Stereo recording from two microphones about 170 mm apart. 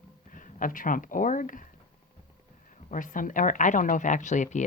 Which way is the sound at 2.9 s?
50° left (ahead or behind).